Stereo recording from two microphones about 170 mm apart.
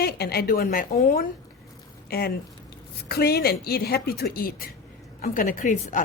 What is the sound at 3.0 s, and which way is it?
A woman's voice, 65° left (ahead or behind).